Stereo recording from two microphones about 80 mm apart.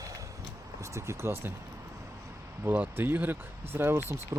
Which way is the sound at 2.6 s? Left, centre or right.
Right.